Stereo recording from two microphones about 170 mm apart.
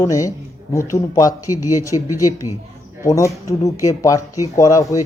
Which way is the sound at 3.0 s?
20° left (ahead or behind).